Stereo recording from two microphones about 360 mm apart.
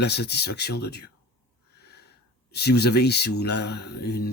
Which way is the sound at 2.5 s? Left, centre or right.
Left.